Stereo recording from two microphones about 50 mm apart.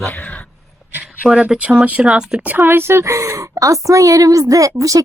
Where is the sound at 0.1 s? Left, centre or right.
Left.